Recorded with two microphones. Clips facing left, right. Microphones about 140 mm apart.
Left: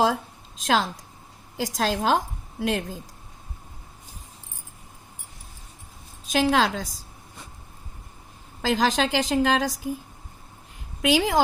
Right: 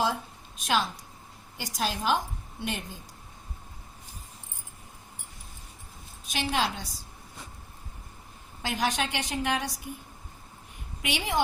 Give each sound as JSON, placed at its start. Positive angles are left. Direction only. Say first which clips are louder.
{"t": 0.0, "sound": "a sound", "louder": "left 6 dB", "side_deg": 90}
{"t": 1.5, "sound": "a woman's voice", "louder": "left 6 dB", "side_deg": 90}
{"t": 6.3, "sound": "a woman's voice", "louder": "left 8 dB", "side_deg": 90}
{"t": 8.6, "sound": "a woman's voice", "louder": "left 7 dB", "side_deg": 90}
{"t": 11.0, "sound": "a woman's voice", "louder": "left 8 dB", "side_deg": 90}